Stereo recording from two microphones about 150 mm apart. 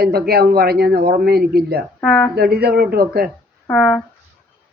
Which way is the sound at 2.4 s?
90° right.